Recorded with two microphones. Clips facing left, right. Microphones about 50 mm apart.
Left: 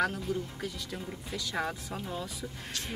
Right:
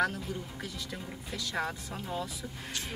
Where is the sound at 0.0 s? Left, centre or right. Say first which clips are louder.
Left 1 dB; centre.